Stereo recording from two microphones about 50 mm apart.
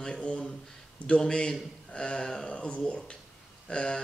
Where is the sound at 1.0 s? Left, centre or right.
Centre.